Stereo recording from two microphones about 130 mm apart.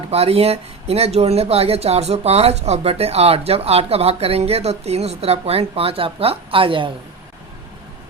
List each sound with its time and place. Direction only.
0.1 s speech: 50° right (ahead or behind)